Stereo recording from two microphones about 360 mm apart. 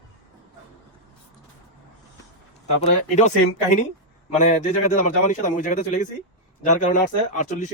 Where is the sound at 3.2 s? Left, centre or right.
Centre.